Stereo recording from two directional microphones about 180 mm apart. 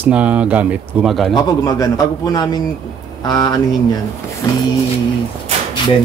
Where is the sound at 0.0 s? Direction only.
5° right (ahead or behind).